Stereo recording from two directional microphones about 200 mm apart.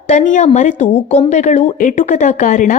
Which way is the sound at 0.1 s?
35° left (ahead or behind).